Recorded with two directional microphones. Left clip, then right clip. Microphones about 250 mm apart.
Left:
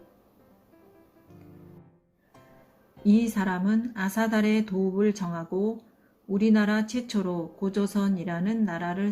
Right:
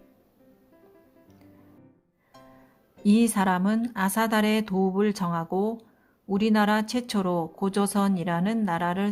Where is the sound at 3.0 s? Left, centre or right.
Right.